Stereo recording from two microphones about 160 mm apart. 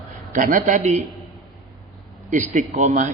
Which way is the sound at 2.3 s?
50° right (ahead or behind).